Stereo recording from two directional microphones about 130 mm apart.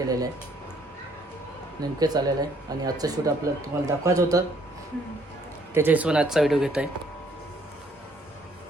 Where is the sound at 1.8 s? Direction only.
30° right (ahead or behind).